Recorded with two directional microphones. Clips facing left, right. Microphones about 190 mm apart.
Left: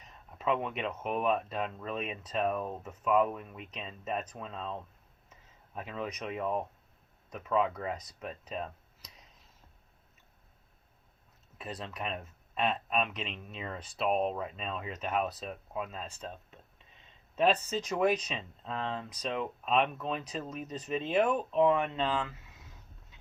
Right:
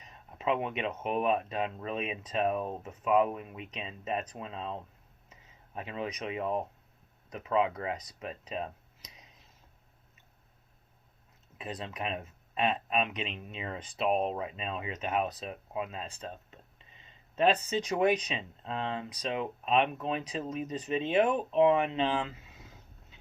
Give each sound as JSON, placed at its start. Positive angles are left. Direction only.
{"t": 0.3, "sound": "speech", "side_deg": -10}
{"t": 11.6, "sound": "speech", "side_deg": 0}
{"t": 22.0, "sound": "speech", "side_deg": -20}